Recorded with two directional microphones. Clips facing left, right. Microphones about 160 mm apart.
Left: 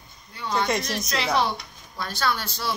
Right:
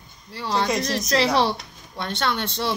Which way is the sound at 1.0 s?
35° right (ahead or behind).